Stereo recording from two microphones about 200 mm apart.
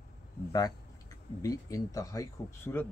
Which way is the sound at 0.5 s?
20° left (ahead or behind).